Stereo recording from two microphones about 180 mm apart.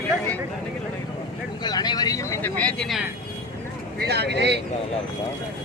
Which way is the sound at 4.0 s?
65° right (ahead or behind).